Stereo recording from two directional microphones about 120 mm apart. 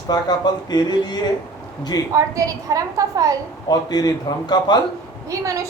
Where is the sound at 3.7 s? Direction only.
35° left (ahead or behind).